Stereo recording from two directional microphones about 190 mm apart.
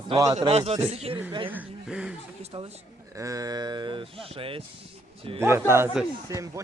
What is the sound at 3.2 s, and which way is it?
Speech, 15° right (ahead or behind).